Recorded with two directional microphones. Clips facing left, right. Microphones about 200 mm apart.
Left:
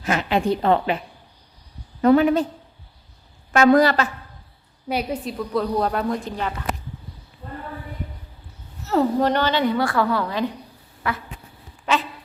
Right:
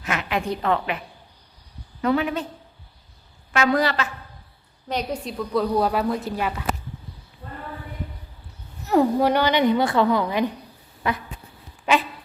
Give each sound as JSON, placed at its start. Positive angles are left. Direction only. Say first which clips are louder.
{"t": 0.0, "sound": "a woman's voice", "louder": "left 5 dB", "side_deg": 35}
{"t": 3.5, "sound": "a woman's voice", "louder": "left 6 dB", "side_deg": 45}
{"t": 4.9, "sound": "a woman's voice", "louder": "left 2 dB", "side_deg": 10}
{"t": 8.8, "sound": "a woman's voice", "louder": "right 1 dB", "side_deg": -15}
{"t": 11.0, "sound": "insect", "louder": "right 1 dB", "side_deg": -20}
{"t": 11.9, "sound": "dog", "louder": "right 2 dB", "side_deg": -10}